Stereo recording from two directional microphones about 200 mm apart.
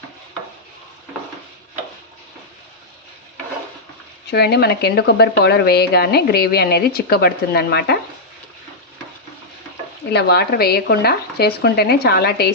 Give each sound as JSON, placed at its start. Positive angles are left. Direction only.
{"t": 4.3, "sound": "speech", "side_deg": 55}
{"t": 10.1, "sound": "speech", "side_deg": 55}